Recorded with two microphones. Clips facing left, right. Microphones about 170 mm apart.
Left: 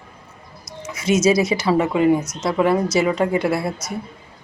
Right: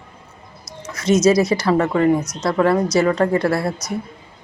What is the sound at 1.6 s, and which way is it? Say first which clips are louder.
A woman's voice: left 2 dB; 5° left (ahead or behind).